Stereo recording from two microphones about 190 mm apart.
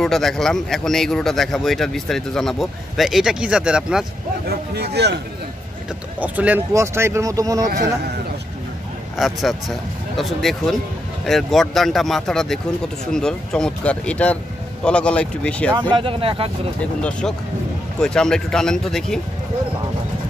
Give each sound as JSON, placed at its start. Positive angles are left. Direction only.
{"t": 0.0, "sound": "speech", "side_deg": 0}
{"t": 4.5, "sound": "speech", "side_deg": -60}
{"t": 6.1, "sound": "speech", "side_deg": -10}
{"t": 9.2, "sound": "speech", "side_deg": 0}
{"t": 15.9, "sound": "speech", "side_deg": -30}
{"t": 17.9, "sound": "speech", "side_deg": 5}